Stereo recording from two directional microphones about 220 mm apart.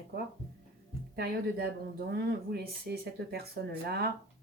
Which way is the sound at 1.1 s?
45° right (ahead or behind).